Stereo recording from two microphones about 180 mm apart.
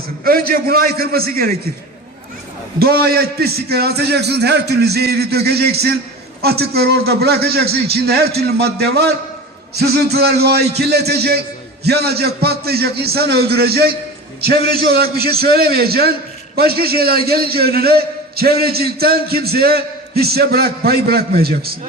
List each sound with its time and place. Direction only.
0.3 s a man's voice: 55° right (ahead or behind)
2.7 s a man's voice: 60° right (ahead or behind)